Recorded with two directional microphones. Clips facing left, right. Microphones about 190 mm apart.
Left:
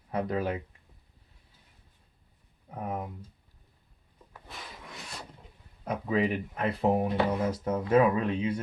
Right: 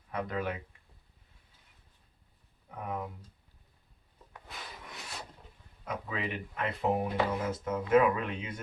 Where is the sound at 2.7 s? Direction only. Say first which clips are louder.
Left 3 dB; 25° left (ahead or behind).